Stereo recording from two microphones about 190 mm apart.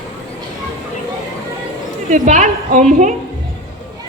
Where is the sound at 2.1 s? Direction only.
40° right (ahead or behind).